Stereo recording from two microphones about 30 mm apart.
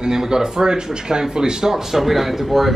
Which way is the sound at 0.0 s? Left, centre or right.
Centre.